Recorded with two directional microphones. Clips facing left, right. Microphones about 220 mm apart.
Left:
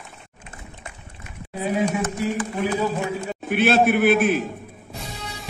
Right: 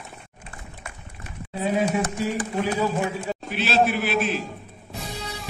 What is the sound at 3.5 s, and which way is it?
Speech, 55° left (ahead or behind).